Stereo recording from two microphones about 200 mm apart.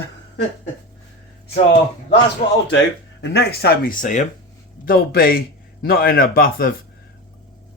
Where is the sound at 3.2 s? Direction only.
55° left (ahead or behind).